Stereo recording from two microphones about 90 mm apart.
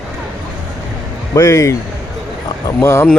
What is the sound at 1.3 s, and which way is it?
Speech, 40° left (ahead or behind).